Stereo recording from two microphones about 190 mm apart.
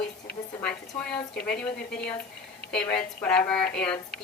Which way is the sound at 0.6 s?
5° left (ahead or behind).